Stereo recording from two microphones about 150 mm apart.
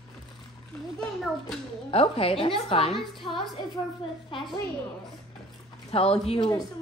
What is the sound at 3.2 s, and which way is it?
A woman's voice, 35° left (ahead or behind).